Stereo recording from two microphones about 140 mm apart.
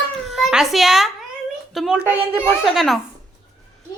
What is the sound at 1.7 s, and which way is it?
A woman's voice, centre (ahead or behind).